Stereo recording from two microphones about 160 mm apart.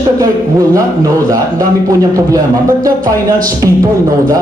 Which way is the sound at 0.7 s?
20° right (ahead or behind).